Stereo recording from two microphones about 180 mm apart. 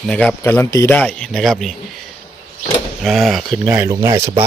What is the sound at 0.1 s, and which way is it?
Speech, 10° left (ahead or behind).